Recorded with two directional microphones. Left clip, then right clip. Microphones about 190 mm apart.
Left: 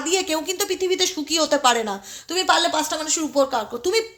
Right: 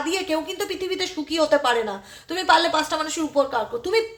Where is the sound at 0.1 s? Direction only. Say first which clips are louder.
Left 6 dB; 35° left (ahead or behind).